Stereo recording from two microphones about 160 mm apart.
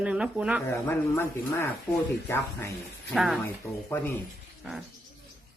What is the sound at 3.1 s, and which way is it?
Speech, centre (ahead or behind).